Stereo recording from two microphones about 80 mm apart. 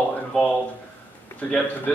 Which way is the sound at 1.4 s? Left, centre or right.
Centre.